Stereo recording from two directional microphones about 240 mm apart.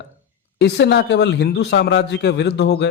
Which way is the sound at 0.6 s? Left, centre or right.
Left.